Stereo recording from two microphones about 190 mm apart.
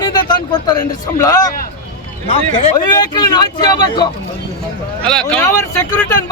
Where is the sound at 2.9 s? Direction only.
20° left (ahead or behind).